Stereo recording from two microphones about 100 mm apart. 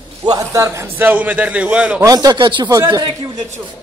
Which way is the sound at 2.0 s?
40° right (ahead or behind).